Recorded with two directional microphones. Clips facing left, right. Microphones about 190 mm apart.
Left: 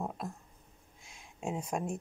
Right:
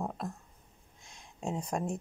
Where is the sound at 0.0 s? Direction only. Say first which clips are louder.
Right 1 dB; 5° left (ahead or behind).